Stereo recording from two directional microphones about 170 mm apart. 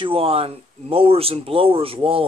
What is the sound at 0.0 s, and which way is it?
Speech, 30° right (ahead or behind).